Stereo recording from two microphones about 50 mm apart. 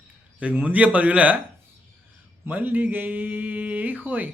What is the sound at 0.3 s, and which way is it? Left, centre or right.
Speech, right.